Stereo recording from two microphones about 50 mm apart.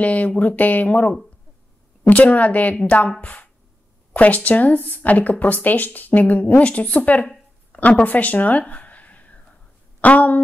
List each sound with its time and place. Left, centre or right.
0.0 s speech: left
8.0 s a sound: left
10.0 s speech: left